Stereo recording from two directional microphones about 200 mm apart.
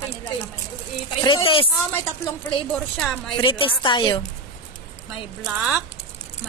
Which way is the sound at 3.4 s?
25° left (ahead or behind).